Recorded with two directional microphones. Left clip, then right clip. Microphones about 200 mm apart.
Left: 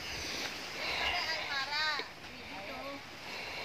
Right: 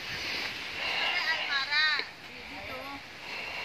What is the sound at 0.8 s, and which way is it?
Vehicle, centre (ahead or behind).